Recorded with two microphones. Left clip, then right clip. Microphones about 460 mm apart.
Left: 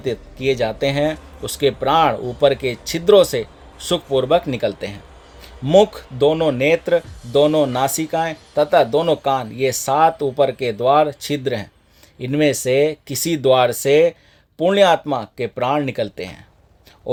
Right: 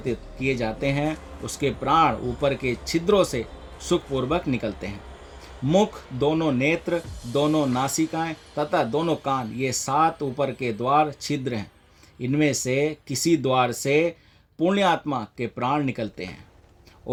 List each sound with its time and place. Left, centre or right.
0.0 s speech: centre